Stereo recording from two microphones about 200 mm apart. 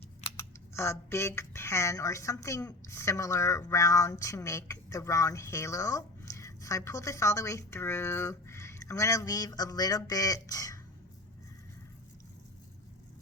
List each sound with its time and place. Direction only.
0.3 s speech: 15° left (ahead or behind)